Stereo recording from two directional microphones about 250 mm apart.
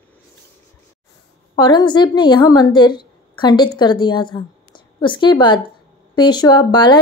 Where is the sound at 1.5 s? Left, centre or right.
Centre.